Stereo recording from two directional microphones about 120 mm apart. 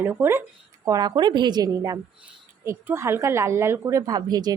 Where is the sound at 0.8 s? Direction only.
35° right (ahead or behind).